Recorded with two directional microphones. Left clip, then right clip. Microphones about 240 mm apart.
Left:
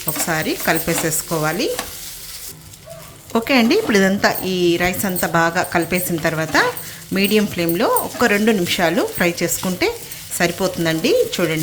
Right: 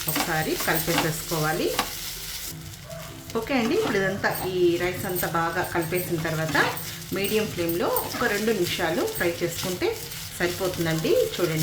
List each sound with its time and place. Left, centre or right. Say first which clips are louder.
0.3 s speech: left 9 dB; left
3.3 s speech: left 9 dB; left